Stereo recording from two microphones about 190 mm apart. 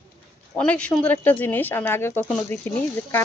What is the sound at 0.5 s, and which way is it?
Speech, 5° left (ahead or behind).